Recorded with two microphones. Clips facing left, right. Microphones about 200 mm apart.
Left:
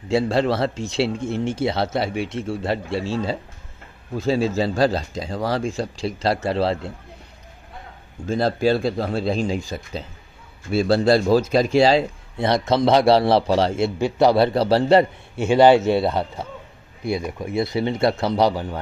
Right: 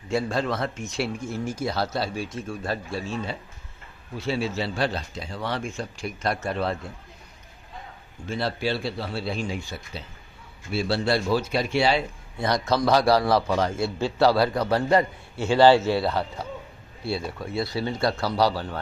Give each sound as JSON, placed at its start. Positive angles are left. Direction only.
{"t": 0.1, "sound": "a man's voice", "side_deg": 30}
{"t": 8.3, "sound": "a man's voice", "side_deg": 45}
{"t": 10.8, "sound": "speech", "side_deg": 40}
{"t": 12.4, "sound": "a man's voice", "side_deg": 25}